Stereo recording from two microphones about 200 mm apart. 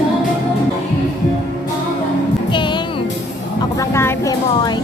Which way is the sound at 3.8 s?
10° left (ahead or behind).